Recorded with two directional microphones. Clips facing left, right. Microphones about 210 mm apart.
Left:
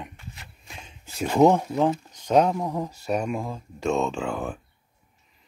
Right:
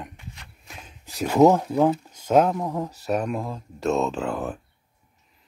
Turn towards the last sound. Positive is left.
turn(degrees=0)  # may be behind; listen again after turning